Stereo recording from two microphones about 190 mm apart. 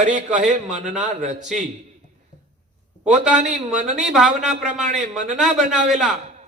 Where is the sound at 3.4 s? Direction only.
40° right (ahead or behind).